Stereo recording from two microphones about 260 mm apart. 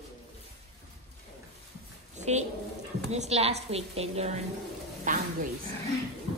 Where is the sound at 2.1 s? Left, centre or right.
Right.